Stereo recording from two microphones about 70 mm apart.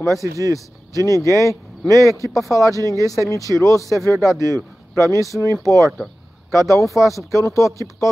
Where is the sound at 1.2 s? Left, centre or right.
Left.